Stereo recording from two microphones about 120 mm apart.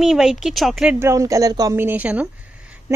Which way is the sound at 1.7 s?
15° right (ahead or behind).